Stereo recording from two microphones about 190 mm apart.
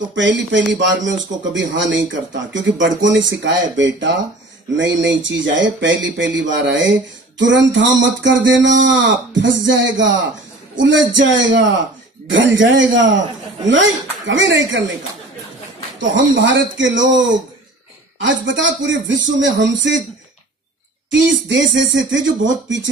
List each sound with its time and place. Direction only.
0.1 s speech: 75° right (ahead or behind)
1.0 s speech: 40° right (ahead or behind)
1.5 s speech: 75° right (ahead or behind)
16.0 s speech: 75° right (ahead or behind)
21.5 s speech: 75° right (ahead or behind)